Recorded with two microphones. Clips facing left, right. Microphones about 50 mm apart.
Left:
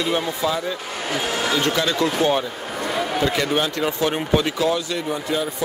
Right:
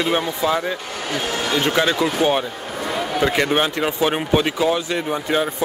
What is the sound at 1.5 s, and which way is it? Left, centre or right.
Speech, right.